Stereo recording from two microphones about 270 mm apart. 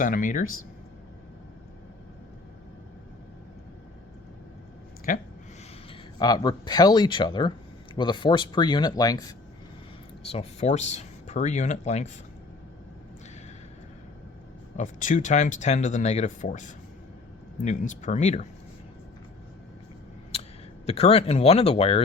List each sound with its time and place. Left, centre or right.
0.0 s speech: left
5.1 s speech: left
5.9 s speech: centre
10.3 s speech: left
14.8 s speech: left
20.3 s a sound: left
20.8 s speech: left